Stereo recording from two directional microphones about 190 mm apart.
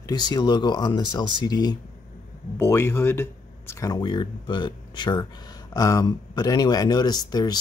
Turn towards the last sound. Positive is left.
turn(degrees=20)  # may be behind; listen again after turning